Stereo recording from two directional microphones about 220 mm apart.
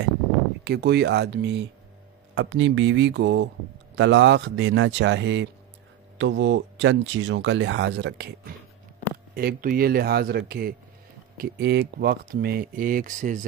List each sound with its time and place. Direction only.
0.7 s speech: 45° right (ahead or behind)
9.3 s speech: 40° right (ahead or behind)